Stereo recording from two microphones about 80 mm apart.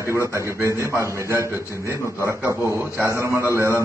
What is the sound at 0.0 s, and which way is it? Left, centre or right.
A man's voice, right.